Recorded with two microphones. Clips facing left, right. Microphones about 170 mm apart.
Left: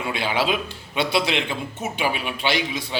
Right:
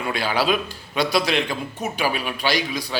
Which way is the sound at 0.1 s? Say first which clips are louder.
Right 2 dB; 20° left (ahead or behind).